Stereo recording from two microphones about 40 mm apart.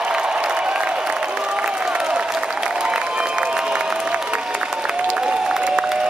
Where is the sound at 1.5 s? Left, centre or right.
Right.